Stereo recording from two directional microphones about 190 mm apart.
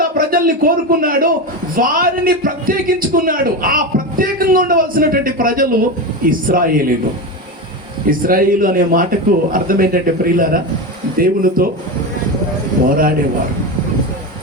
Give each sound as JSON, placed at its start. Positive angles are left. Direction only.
{"t": 0.0, "sound": "a man's voice", "side_deg": -50}
{"t": 8.0, "sound": "a man's voice", "side_deg": -50}
{"t": 12.9, "sound": "a man's voice", "side_deg": -50}